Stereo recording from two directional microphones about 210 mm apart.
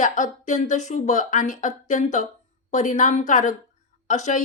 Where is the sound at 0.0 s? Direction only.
35° left (ahead or behind).